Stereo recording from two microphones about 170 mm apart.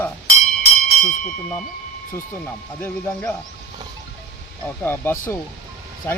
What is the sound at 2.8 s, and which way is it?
Speech, 10° left (ahead or behind).